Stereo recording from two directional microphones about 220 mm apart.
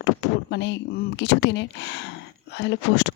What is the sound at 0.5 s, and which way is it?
Speech, 50° left (ahead or behind).